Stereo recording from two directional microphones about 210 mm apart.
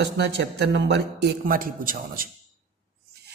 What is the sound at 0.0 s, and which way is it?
A man's voice, 55° right (ahead or behind).